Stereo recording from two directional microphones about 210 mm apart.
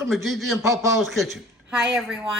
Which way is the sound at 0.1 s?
Centre (ahead or behind).